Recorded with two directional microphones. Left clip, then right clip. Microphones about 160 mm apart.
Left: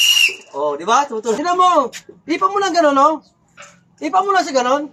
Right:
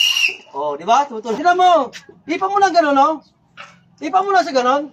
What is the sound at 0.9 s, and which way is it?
A man's voice, 10° right (ahead or behind).